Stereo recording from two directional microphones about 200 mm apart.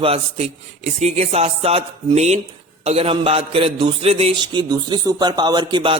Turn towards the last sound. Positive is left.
turn(degrees=-25)  # may be behind; listen again after turning